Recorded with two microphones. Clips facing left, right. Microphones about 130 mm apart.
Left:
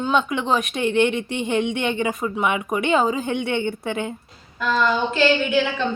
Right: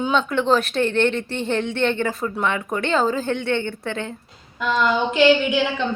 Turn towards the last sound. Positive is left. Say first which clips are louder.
# right 2 dB
turn(degrees=-15)  # may be behind; listen again after turning